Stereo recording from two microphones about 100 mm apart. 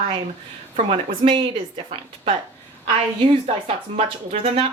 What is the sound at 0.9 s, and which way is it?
Speech, 55° right (ahead or behind).